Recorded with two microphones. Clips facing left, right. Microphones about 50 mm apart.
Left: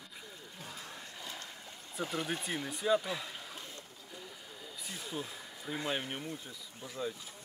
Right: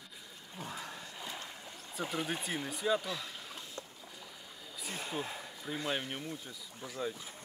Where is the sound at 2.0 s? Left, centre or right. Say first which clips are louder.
Even; centre.